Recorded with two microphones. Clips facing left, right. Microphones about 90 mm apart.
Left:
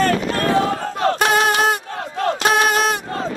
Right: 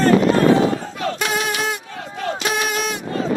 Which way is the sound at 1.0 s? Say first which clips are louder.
Left 8 dB; 50° left (ahead or behind).